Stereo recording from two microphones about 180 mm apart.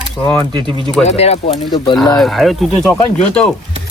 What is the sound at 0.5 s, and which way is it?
Speech, 25° right (ahead or behind).